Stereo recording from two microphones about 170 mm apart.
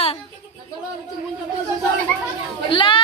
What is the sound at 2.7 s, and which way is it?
Children playing, 30° left (ahead or behind).